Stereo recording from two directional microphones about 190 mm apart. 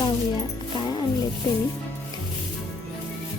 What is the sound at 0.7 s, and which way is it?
Speech, 25° left (ahead or behind).